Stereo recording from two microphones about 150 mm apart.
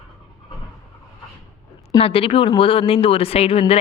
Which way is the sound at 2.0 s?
40° left (ahead or behind).